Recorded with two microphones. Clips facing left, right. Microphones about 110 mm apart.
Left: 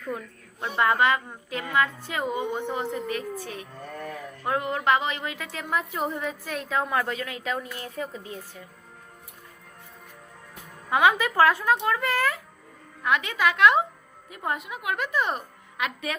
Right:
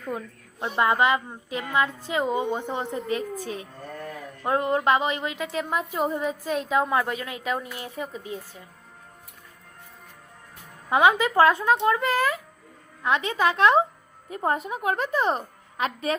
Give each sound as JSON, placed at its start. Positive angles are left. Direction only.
{"t": 0.1, "sound": "a woman's voice", "side_deg": -20}
{"t": 10.8, "sound": "a woman's voice", "side_deg": -25}